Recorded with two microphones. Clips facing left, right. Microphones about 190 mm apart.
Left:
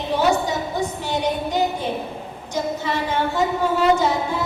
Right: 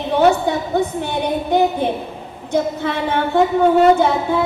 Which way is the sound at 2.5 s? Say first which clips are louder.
Right 5 dB; 60° right (ahead or behind).